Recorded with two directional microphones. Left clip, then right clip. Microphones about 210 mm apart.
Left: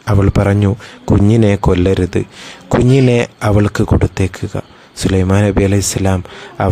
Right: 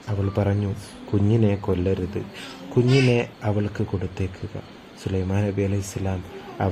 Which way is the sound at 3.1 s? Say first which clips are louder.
Left 10 dB; 45° left (ahead or behind).